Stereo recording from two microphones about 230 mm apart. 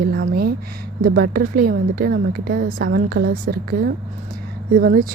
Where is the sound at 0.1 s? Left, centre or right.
Right.